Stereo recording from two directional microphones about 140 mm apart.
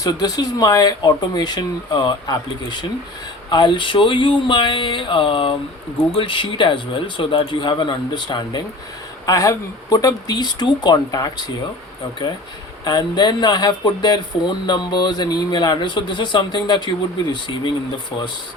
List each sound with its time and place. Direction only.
0.0 s speech: 30° left (ahead or behind)
12.8 s speech: 30° left (ahead or behind)